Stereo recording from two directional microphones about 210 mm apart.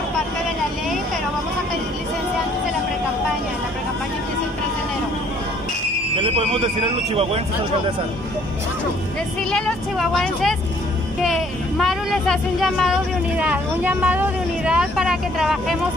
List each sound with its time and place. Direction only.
9.5 s speech: 5° left (ahead or behind)